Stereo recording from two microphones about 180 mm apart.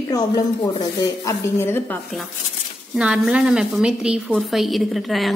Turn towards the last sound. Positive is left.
turn(degrees=0)  # may be behind; listen again after turning